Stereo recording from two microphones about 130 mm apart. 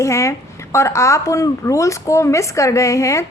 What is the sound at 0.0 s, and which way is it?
A woman's voice, 20° left (ahead or behind).